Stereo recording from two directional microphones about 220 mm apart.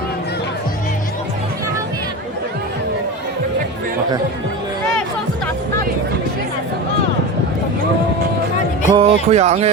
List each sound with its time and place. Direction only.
9.0 s speech: 30° right (ahead or behind)